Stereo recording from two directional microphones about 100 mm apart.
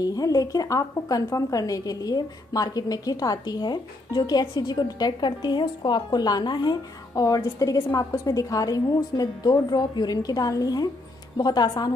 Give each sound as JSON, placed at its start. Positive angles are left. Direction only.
{"t": 0.0, "sound": "a woman's voice", "side_deg": 40}